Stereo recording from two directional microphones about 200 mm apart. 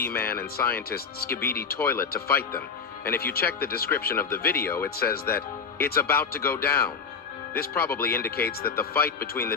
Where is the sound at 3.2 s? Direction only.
50° left (ahead or behind).